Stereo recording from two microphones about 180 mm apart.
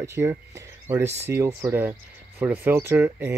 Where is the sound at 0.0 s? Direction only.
15° right (ahead or behind).